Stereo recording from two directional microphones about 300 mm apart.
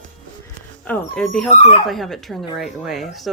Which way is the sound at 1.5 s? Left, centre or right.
Left.